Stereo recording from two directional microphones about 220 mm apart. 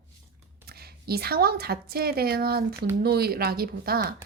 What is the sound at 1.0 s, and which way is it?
A woman's voice, 45° right (ahead or behind).